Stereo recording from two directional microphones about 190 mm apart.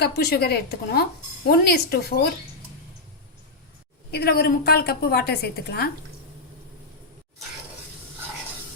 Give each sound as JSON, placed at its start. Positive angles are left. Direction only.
{"t": 0.0, "sound": "a woman's voice", "side_deg": 60}
{"t": 4.1, "sound": "a woman's voice", "side_deg": 55}